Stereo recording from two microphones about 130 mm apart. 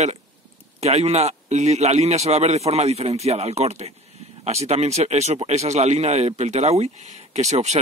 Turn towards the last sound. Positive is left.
turn(degrees=-60)  # may be behind; listen again after turning